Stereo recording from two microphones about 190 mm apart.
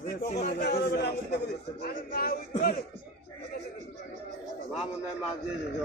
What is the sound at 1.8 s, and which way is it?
Speech, 50° left (ahead or behind).